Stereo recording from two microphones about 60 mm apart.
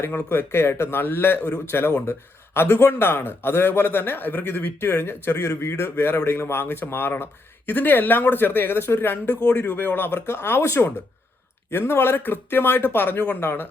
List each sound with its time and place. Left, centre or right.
0.3 s speech: left
11.7 s speech: left